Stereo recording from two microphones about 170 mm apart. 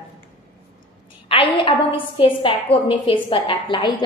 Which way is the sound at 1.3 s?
35° left (ahead or behind).